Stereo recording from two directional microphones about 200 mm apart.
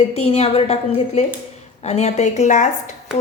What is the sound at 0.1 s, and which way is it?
A woman's voice, 30° left (ahead or behind).